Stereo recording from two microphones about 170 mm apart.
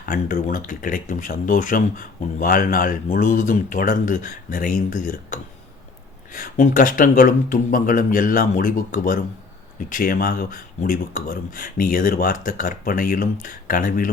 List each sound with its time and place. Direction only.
0.0 s speech: 55° left (ahead or behind)